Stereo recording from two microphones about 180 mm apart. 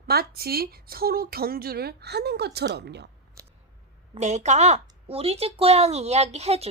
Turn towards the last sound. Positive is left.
turn(degrees=-35)  # may be behind; listen again after turning